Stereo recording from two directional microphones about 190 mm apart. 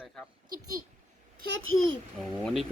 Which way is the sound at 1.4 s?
80° right.